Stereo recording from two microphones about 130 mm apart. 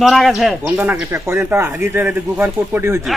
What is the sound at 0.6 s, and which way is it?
Speech, 15° right (ahead or behind).